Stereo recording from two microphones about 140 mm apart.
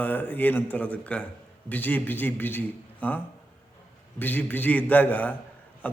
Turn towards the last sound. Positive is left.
turn(degrees=10)  # may be behind; listen again after turning